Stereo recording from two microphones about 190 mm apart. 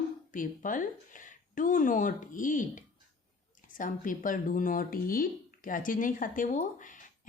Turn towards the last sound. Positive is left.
turn(degrees=45)  # may be behind; listen again after turning